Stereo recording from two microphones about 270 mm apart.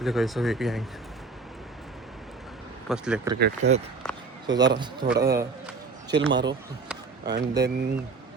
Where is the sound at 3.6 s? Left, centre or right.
Right.